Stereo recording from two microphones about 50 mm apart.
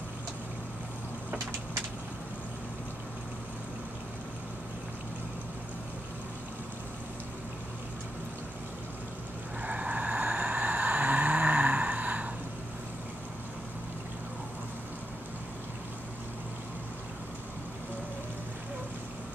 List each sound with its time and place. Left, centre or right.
9.6 s vehicle: right